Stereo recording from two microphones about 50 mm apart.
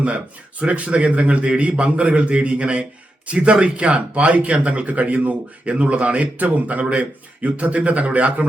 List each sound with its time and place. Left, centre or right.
0.6 s speech: right